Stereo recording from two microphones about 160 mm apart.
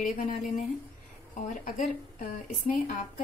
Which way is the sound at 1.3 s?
55° left (ahead or behind).